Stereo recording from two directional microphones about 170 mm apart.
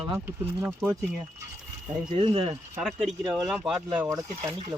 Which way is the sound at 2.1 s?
35° right (ahead or behind).